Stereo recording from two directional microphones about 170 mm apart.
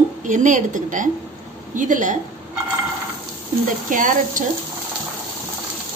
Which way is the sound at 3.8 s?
50° right (ahead or behind).